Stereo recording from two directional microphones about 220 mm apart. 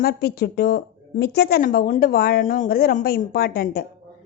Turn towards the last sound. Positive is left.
turn(degrees=45)  # may be behind; listen again after turning